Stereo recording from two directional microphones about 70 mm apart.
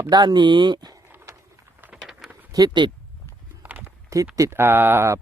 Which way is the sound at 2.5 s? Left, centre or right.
Right.